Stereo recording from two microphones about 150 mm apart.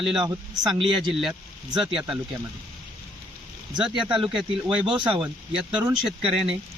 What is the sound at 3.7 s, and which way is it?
Speech, 5° right (ahead or behind).